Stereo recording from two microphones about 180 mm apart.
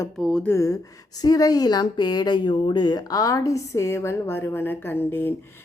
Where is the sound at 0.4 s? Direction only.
15° left (ahead or behind).